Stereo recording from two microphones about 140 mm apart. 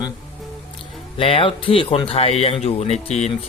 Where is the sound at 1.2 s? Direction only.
40° left (ahead or behind).